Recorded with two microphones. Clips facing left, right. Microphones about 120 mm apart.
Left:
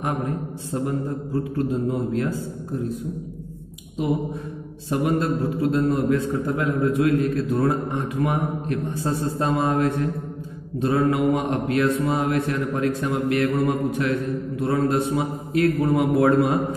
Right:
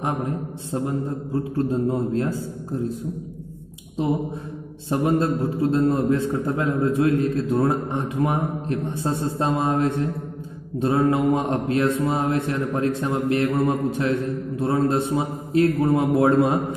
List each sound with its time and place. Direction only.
0.7 s mantra: 25° right (ahead or behind)
4.8 s mantra: 25° right (ahead or behind)